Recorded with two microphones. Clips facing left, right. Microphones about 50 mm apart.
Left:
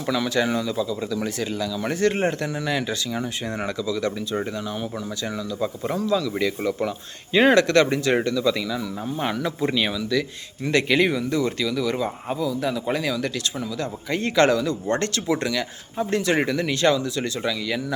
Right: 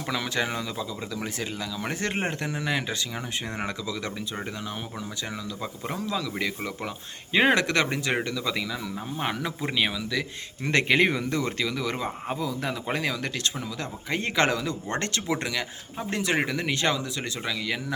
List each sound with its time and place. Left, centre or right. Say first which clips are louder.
0.1 s speech: left 6 dB; right
10.6 s speech: left 2 dB; right; by 17.8 s centre